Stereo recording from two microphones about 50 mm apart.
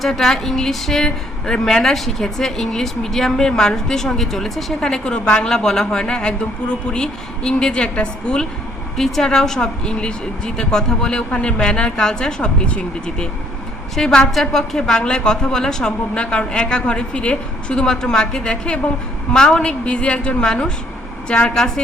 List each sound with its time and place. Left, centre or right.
0.0 s a woman's voice: centre